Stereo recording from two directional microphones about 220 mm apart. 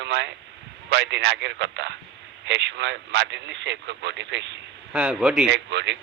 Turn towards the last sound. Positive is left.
turn(degrees=-55)  # may be behind; listen again after turning